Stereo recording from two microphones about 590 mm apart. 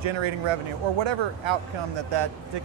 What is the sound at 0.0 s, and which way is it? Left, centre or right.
Speech, right.